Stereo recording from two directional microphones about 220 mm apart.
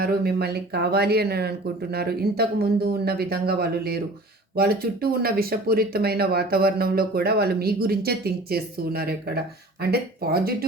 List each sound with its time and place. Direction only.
0.0 s speech: 45° right (ahead or behind)